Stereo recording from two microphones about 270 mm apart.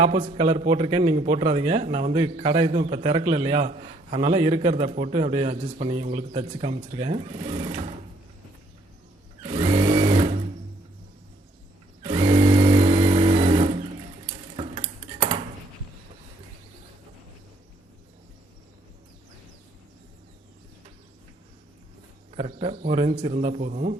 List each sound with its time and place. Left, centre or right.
0.0 s a man's voice: right
9.4 s sewing machine: centre
12.0 s sewing machine: centre
14.3 s dishes: centre
22.3 s a man's voice: right